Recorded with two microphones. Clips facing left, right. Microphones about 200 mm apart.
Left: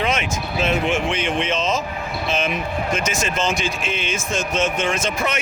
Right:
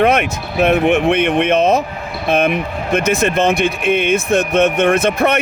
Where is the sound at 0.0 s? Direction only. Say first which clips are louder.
Right 8 dB; 60° right (ahead or behind).